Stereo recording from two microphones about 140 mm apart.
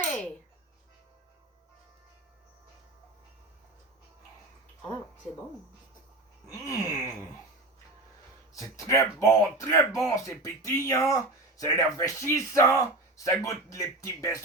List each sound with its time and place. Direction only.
6.5 s speech: 20° left (ahead or behind)
8.7 s speech: 20° left (ahead or behind)